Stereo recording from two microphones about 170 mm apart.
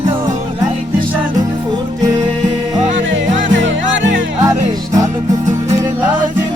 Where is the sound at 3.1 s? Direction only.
90° right.